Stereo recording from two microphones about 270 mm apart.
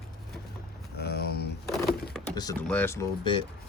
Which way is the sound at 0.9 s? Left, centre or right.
Left.